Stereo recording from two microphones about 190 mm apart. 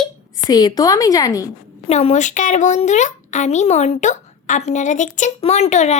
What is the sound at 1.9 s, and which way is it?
Speech, 35° left (ahead or behind).